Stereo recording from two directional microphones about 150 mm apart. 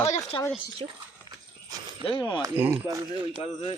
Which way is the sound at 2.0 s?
30° left (ahead or behind).